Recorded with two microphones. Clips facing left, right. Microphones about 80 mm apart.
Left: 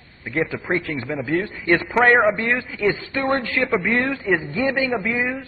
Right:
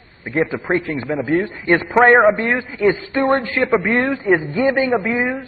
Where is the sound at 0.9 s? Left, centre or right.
Centre.